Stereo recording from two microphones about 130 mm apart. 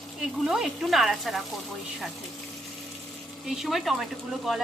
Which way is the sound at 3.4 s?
Centre (ahead or behind).